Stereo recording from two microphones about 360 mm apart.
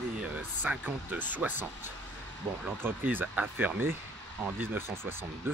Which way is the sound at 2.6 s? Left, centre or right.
Centre.